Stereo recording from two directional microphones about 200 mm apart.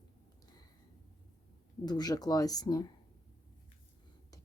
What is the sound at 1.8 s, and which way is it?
Speech, 20° left (ahead or behind).